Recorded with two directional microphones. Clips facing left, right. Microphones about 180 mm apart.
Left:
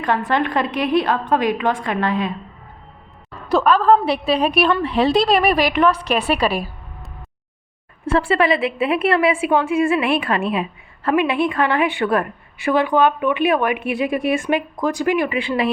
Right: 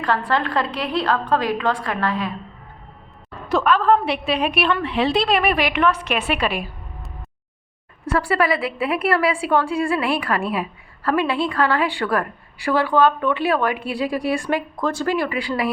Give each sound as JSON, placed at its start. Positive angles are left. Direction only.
{"t": 0.0, "sound": "a woman's voice", "side_deg": 20}
{"t": 3.5, "sound": "a woman's voice", "side_deg": 35}
{"t": 8.0, "sound": "a woman's voice", "side_deg": 25}